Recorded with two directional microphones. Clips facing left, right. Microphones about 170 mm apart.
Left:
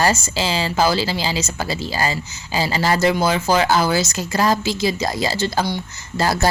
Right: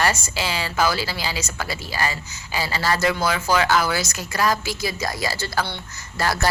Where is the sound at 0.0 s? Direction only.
30° left (ahead or behind).